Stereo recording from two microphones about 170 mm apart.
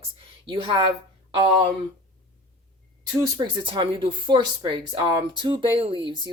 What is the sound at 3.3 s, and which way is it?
Speech, 30° right (ahead or behind).